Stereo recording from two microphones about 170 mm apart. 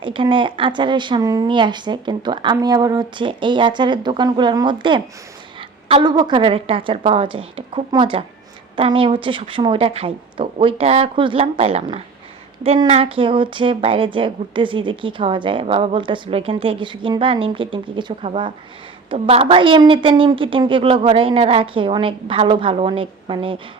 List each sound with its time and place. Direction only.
0.0 s a woman's voice: 30° right (ahead or behind)